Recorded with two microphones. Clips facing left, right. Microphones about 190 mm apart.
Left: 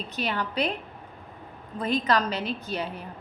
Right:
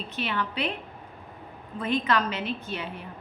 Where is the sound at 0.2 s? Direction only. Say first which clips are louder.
Left 2 dB; 40° left (ahead or behind).